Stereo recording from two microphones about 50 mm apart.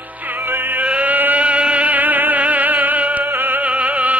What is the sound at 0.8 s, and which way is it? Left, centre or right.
Music, right.